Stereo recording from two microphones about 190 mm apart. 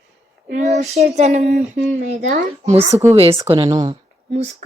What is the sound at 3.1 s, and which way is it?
Speech, 30° right (ahead or behind).